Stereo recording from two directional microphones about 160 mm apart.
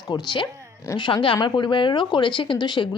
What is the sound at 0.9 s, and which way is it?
Speech, 30° left (ahead or behind).